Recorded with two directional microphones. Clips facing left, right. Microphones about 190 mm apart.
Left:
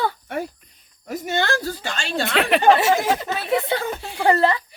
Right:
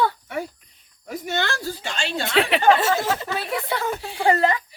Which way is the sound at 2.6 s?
15° left (ahead or behind).